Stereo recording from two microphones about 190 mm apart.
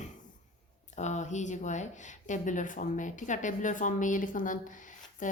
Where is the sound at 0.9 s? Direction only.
40° left (ahead or behind).